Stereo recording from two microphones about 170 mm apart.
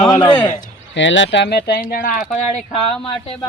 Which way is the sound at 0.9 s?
90° left.